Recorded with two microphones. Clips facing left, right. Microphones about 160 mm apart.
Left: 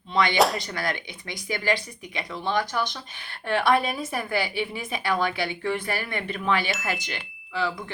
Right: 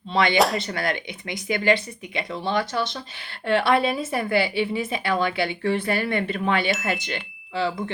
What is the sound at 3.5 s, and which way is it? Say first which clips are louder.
Speech: right 2 dB; 30° right (ahead or behind).